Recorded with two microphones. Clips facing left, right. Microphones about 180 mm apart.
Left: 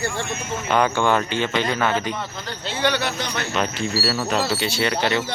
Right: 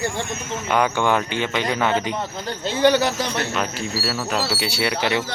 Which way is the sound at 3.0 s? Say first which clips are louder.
Right 4 dB; 35° right (ahead or behind).